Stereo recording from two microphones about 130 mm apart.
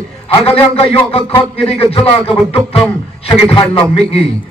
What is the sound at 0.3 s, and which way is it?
A man's voice, 45° left (ahead or behind).